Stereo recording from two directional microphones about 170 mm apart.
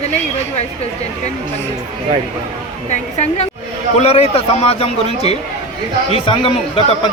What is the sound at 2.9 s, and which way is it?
A man's voice, 40° left (ahead or behind).